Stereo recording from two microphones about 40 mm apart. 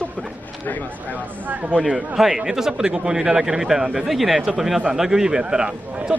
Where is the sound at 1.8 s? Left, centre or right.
Centre.